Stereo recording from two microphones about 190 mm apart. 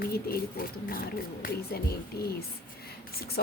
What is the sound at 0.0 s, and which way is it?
Speech, 55° left (ahead or behind).